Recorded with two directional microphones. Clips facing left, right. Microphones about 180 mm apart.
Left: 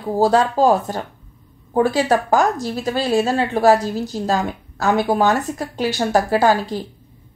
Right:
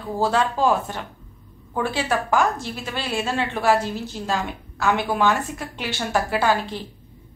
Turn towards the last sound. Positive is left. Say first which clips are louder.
# left 5 dB
turn(degrees=40)  # may be behind; listen again after turning